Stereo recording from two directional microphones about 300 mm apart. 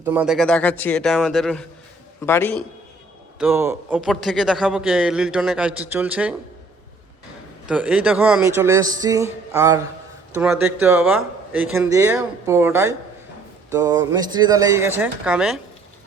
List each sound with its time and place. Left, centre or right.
0.0 s a man's voice: centre
3.3 s a man's voice: centre
7.7 s speech: centre